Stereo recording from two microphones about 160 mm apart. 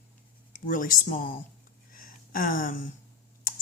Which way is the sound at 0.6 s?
55° left (ahead or behind).